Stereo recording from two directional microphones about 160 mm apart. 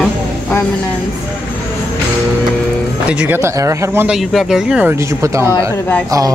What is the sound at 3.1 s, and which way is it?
Speech, 10° right (ahead or behind).